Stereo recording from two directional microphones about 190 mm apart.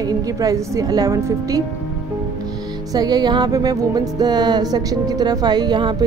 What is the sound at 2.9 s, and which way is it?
Music, 20° right (ahead or behind).